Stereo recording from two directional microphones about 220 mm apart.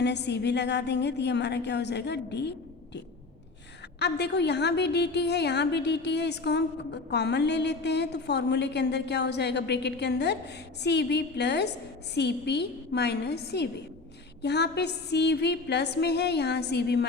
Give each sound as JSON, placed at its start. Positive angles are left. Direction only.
{"t": 0.0, "sound": "a woman's voice", "side_deg": 50}
{"t": 4.0, "sound": "a woman's voice", "side_deg": 50}